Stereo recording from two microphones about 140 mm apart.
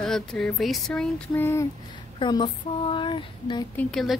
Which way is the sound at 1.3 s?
15° left (ahead or behind).